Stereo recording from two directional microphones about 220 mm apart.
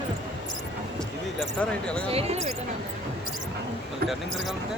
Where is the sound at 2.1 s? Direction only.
25° right (ahead or behind).